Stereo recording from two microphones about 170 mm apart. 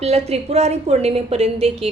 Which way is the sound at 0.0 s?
40° right (ahead or behind).